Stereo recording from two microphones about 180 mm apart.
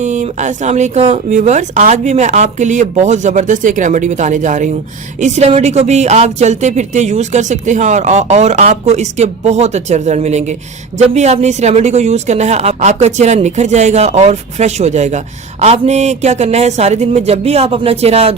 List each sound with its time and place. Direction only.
0.0 s speech: 40° right (ahead or behind)